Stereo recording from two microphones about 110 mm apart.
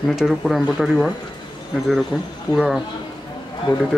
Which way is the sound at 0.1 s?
Centre (ahead or behind).